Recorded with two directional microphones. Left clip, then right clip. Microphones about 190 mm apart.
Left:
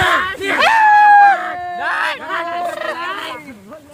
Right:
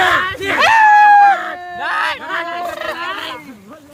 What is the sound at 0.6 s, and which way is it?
Dog, 10° left (ahead or behind).